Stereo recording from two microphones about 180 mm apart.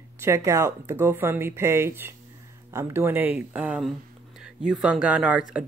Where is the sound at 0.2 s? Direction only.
15° right (ahead or behind).